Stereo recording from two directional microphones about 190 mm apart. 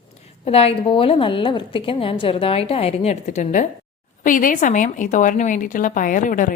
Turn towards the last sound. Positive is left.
turn(degrees=45)  # may be behind; listen again after turning